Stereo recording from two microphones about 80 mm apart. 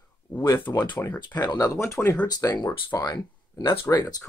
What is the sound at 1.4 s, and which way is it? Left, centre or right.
Speech, left.